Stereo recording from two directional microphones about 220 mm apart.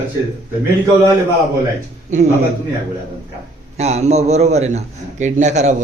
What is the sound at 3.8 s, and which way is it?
A man's voice, 30° right (ahead or behind).